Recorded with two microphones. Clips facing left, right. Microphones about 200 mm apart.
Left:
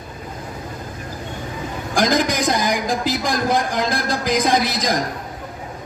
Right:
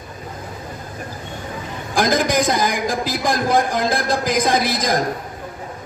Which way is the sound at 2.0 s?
55° right (ahead or behind).